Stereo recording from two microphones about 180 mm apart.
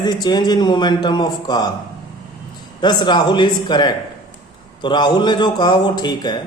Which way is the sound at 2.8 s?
25° left (ahead or behind).